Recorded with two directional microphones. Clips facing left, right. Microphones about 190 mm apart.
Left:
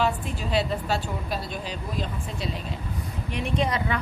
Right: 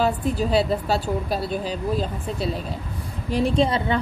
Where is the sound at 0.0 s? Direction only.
40° right (ahead or behind).